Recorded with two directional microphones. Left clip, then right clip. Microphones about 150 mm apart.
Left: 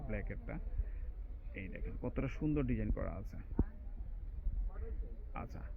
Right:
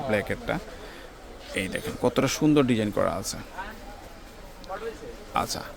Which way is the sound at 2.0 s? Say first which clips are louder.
Right 18 dB; 40° right (ahead or behind).